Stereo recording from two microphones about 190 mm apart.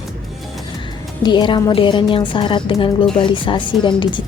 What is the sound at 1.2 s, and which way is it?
Speech, 25° left (ahead or behind).